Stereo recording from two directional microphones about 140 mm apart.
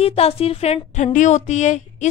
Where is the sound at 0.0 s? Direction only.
45° left (ahead or behind).